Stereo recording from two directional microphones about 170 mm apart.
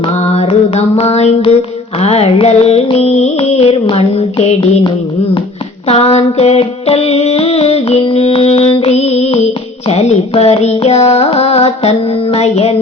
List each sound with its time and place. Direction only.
0.2 s a sound: 40° left (ahead or behind)
2.0 s music: 40° left (ahead or behind)
5.9 s music: 35° left (ahead or behind)